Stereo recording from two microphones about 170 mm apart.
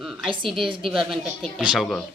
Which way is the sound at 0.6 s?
30° right (ahead or behind).